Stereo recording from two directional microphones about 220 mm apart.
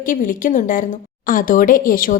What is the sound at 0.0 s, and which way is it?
A woman's voice, 35° left (ahead or behind).